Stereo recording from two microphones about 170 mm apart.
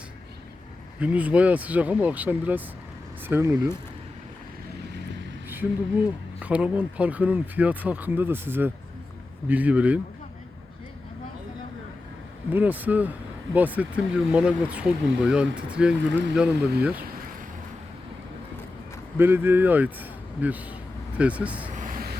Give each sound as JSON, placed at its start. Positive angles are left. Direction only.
{"t": 0.9, "sound": "speech", "side_deg": -10}
{"t": 6.4, "sound": "speech", "side_deg": -5}
{"t": 12.5, "sound": "speech", "side_deg": -10}
{"t": 19.1, "sound": "speech", "side_deg": -15}
{"t": 21.8, "sound": "vehicle", "side_deg": -55}